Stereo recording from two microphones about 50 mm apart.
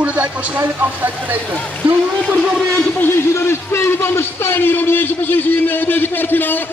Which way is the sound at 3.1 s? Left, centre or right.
Left.